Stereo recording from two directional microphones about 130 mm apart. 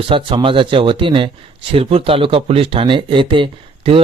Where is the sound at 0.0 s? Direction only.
40° right (ahead or behind).